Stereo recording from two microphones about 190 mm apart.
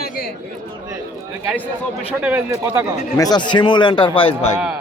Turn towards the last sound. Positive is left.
turn(degrees=30)  # may be behind; listen again after turning